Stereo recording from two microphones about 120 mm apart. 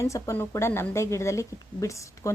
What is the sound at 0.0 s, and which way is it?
A woman's voice, 25° left (ahead or behind).